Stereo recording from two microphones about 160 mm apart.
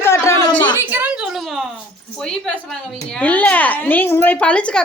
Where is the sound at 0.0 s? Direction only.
20° left (ahead or behind).